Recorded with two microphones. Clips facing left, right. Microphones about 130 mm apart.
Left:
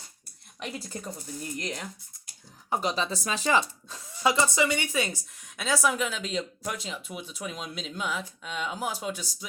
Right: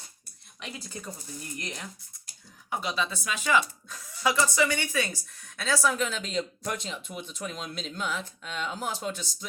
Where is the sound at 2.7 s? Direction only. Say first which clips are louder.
Left 3 dB; 40° left (ahead or behind).